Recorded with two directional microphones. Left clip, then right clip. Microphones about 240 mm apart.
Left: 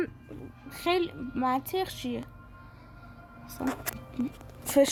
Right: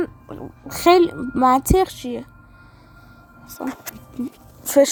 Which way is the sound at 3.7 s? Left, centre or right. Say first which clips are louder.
Right 1 dB; right.